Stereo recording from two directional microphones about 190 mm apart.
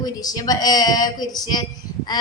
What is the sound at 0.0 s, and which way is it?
A woman's voice, 20° left (ahead or behind).